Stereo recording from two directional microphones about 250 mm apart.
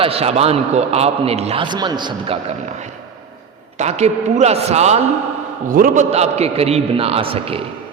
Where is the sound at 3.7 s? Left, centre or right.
Right.